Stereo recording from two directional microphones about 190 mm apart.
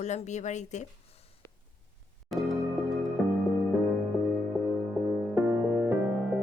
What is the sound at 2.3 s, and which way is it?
Music, centre (ahead or behind).